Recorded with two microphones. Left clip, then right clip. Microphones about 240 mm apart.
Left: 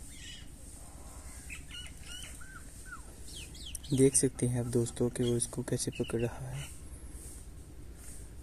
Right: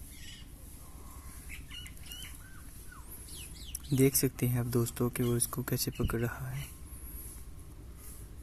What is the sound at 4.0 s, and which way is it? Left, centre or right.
Speech, centre.